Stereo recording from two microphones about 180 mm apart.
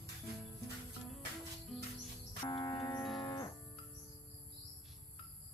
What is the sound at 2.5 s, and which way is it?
Music, 20° left (ahead or behind).